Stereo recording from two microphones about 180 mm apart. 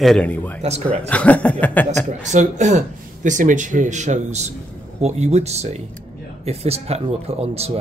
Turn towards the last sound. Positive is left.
turn(degrees=-35)  # may be behind; listen again after turning